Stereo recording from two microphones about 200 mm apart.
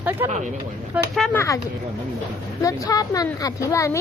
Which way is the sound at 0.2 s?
10° right (ahead or behind).